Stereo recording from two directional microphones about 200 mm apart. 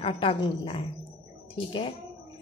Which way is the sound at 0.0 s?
25° left (ahead or behind).